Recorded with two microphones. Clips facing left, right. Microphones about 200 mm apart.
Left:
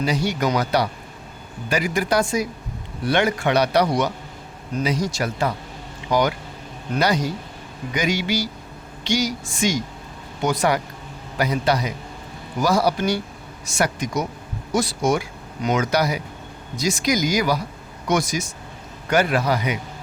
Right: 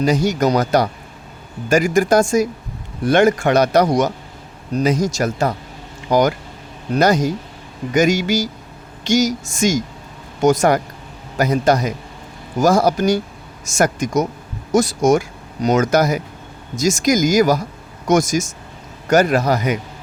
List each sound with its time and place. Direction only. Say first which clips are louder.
0.0 s a man's voice: right 6 dB; 45° right (ahead or behind)